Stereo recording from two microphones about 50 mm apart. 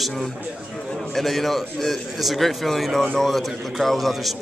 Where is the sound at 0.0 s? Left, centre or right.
Centre.